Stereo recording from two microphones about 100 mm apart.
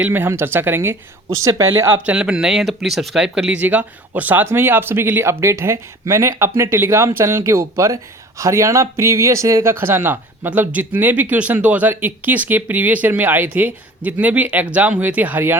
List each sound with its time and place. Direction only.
0.0 s speech: 20° right (ahead or behind)
2.0 s speech: 10° right (ahead or behind)